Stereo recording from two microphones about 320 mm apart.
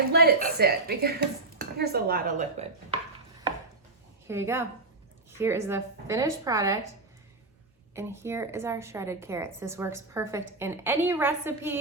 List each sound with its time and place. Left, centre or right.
0.1 s speech: right
4.3 s a woman's voice: centre
7.9 s a woman's voice: centre